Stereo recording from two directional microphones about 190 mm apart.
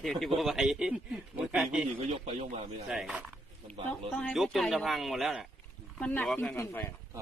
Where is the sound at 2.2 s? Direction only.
30° right (ahead or behind).